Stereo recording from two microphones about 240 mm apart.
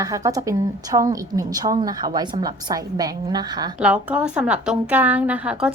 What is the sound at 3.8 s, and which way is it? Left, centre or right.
A woman's voice, centre.